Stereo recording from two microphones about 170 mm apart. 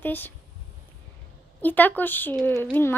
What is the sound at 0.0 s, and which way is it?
Speech, 10° left (ahead or behind).